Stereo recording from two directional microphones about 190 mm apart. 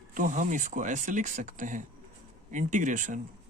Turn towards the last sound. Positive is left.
turn(degrees=-40)  # may be behind; listen again after turning